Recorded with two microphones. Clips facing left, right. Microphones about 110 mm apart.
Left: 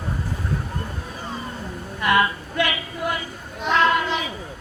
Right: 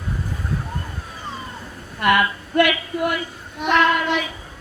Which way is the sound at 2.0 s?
60° right (ahead or behind).